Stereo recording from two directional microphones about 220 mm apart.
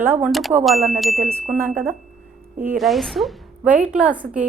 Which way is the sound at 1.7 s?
40° right (ahead or behind).